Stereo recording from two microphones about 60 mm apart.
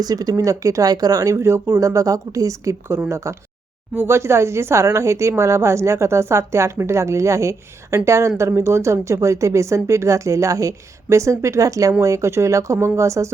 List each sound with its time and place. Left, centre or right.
0.0 s speech: right
1.4 s a woman's voice: right
1.8 s a woman's voice: right
2.9 s a woman's voice: right
11.9 s speech: right